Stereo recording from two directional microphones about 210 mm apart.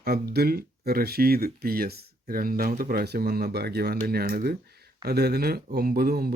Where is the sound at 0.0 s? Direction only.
45° right (ahead or behind).